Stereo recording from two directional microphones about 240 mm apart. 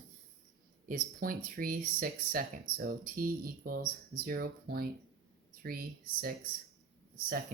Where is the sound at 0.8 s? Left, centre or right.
Right.